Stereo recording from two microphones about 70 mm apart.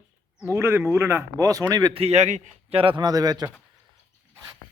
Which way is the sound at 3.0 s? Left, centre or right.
Right.